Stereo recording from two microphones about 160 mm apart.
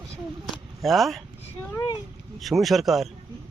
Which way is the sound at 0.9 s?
Centre (ahead or behind).